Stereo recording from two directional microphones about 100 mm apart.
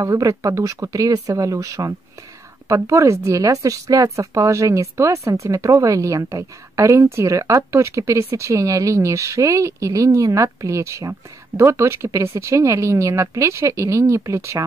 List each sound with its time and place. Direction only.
0.0 s a woman's voice: 35° right (ahead or behind)